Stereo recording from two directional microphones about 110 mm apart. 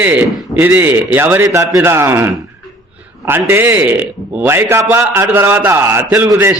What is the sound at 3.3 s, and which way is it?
A man's voice, 20° right (ahead or behind).